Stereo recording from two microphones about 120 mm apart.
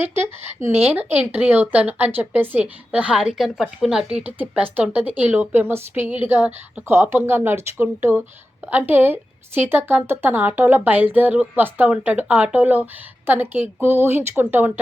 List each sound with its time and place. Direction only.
0.0 s speech: 20° right (ahead or behind)